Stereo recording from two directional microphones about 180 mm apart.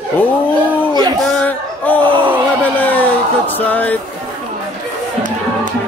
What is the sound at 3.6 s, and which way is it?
Speech, 10° left (ahead or behind).